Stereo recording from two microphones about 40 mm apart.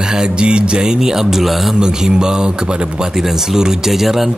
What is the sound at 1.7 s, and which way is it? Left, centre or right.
Speech, centre.